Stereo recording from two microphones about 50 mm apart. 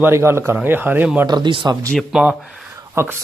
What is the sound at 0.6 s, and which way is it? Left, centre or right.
Speech, right.